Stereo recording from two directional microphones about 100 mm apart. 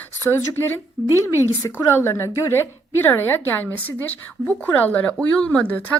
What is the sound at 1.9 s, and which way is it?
A woman's voice, 25° left (ahead or behind).